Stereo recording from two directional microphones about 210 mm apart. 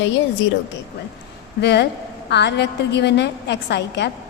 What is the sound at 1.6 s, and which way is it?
A woman's voice, 55° left (ahead or behind).